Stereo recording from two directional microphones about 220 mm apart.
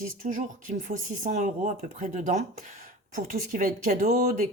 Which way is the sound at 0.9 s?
35° right (ahead or behind).